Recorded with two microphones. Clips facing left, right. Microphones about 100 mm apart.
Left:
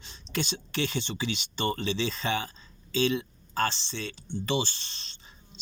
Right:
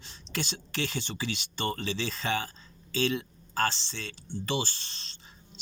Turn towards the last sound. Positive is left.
turn(degrees=20)  # may be behind; listen again after turning